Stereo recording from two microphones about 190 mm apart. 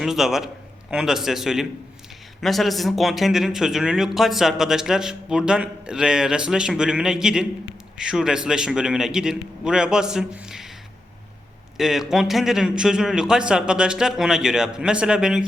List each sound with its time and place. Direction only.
0.0 s a man's voice: centre (ahead or behind)
11.8 s speech: centre (ahead or behind)